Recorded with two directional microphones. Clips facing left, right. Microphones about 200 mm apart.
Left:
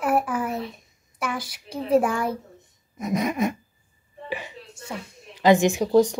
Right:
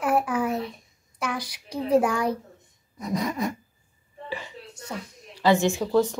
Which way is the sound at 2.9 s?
20° left (ahead or behind).